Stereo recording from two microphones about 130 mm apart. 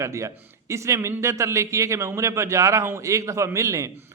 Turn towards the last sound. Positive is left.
turn(degrees=-25)  # may be behind; listen again after turning